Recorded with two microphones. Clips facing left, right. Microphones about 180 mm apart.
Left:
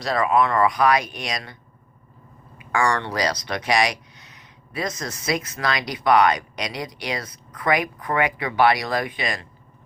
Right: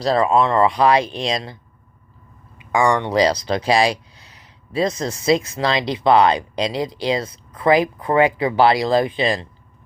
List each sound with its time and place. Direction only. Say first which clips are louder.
0.0 s speech: right 4 dB; 30° right (ahead or behind)
2.6 s speech: right 5 dB; 20° right (ahead or behind)